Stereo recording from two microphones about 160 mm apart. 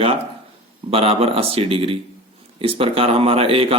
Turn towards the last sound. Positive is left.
turn(degrees=-35)  # may be behind; listen again after turning